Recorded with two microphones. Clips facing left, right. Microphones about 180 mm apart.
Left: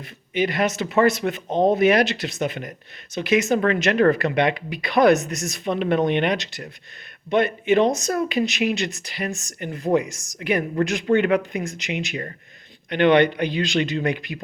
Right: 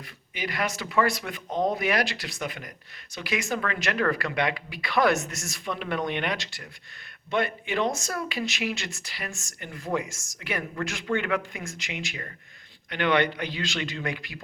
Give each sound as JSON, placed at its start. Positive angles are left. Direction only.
{"t": 0.3, "sound": "speech", "side_deg": 25}